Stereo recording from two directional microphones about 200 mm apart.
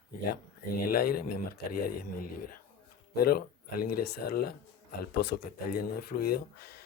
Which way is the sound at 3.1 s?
50° left (ahead or behind).